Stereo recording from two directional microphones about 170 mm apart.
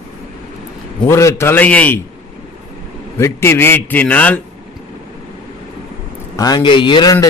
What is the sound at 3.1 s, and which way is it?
A man's voice, 15° left (ahead or behind).